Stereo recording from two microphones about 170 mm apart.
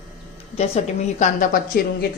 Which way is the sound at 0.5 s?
40° left (ahead or behind).